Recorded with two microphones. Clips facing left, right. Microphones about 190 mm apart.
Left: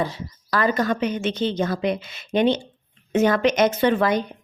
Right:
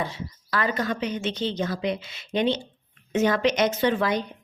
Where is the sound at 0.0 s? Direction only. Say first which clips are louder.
Left 4 dB; 40° left (ahead or behind).